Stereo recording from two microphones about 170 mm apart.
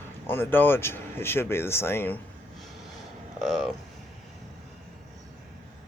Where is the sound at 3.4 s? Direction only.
Centre (ahead or behind).